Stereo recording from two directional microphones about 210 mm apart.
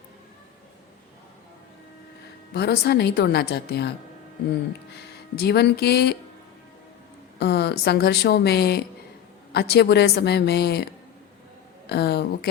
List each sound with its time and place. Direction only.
2.5 s a woman's voice: 50° left (ahead or behind)
5.4 s a woman's voice: 50° left (ahead or behind)
7.3 s a woman's voice: 50° left (ahead or behind)
11.9 s a woman's voice: 50° left (ahead or behind)